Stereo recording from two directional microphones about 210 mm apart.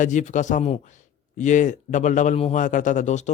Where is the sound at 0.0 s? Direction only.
35° left (ahead or behind).